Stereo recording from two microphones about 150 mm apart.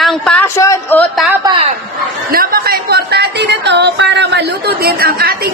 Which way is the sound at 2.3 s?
80° right.